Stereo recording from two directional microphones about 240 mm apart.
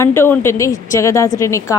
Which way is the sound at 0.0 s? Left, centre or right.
Centre.